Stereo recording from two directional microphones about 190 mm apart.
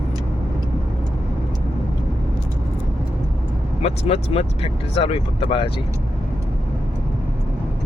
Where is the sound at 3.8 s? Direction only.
30° left (ahead or behind).